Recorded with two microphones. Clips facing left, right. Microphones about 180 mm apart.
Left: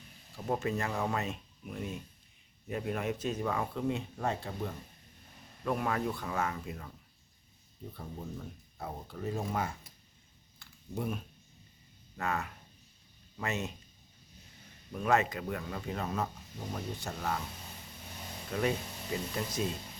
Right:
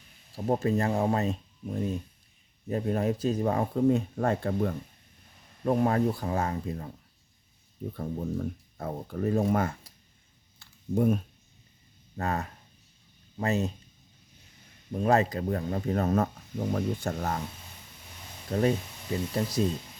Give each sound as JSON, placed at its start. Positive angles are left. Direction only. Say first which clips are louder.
{"t": 0.3, "sound": "speech", "louder": "right 7 dB", "side_deg": -35}
{"t": 5.6, "sound": "speech", "louder": "right 8 dB", "side_deg": -35}
{"t": 7.9, "sound": "speech", "louder": "right 11 dB", "side_deg": -50}
{"t": 10.9, "sound": "speech", "louder": "right 11 dB", "side_deg": -45}
{"t": 12.1, "sound": "speech", "louder": "right 4 dB", "side_deg": -35}
{"t": 14.9, "sound": "speech", "louder": "right 5 dB", "side_deg": -35}
{"t": 18.5, "sound": "speech", "louder": "right 6 dB", "side_deg": -35}